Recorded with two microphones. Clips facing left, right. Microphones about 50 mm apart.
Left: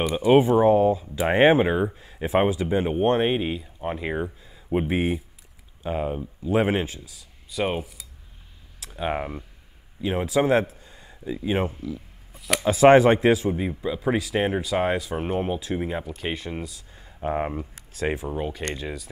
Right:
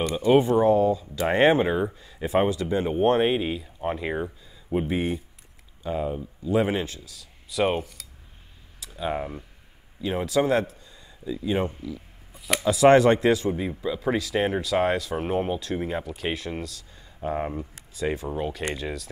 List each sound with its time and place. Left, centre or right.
0.2 s speech: centre
3.0 s speech: centre
4.7 s speech: left
7.5 s speech: centre
8.9 s speech: left
10.0 s speech: centre
10.8 s a sound: left
11.3 s speech: left
13.0 s speech: centre
13.4 s speech: centre
17.2 s speech: left
18.1 s speech: centre